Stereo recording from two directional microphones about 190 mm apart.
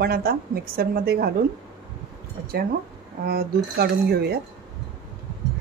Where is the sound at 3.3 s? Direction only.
55° right (ahead or behind).